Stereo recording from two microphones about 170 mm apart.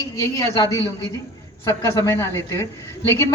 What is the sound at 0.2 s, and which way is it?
A woman's voice, 20° left (ahead or behind).